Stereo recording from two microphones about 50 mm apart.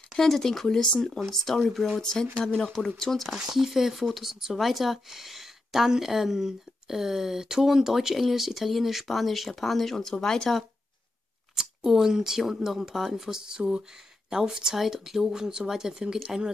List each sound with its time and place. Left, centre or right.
0.1 s speech: centre
3.3 s speech: centre
11.5 s speech: centre